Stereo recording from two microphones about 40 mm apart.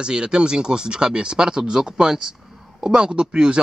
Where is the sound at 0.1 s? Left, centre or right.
Right.